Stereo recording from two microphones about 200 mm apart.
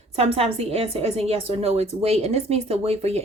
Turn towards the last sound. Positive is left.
turn(degrees=-30)  # may be behind; listen again after turning